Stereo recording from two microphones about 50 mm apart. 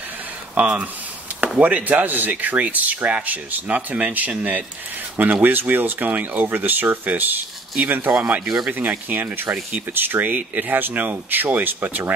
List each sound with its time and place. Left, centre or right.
0.6 s speech: right